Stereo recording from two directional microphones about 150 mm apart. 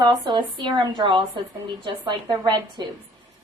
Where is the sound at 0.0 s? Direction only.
30° right (ahead or behind).